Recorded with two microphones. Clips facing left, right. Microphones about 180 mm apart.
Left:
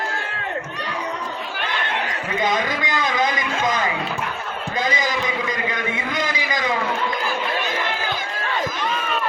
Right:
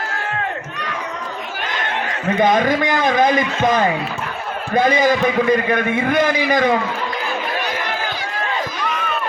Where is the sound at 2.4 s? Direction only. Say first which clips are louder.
Right 8 dB; 50° right (ahead or behind).